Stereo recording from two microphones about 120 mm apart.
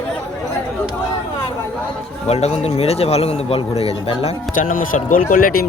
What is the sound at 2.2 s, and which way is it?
Speech, 65° left (ahead or behind).